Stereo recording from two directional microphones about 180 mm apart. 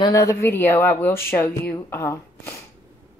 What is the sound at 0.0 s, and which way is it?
Speech, 20° left (ahead or behind).